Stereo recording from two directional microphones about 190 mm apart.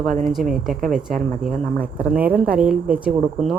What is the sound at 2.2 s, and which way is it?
A woman's voice, 10° right (ahead or behind).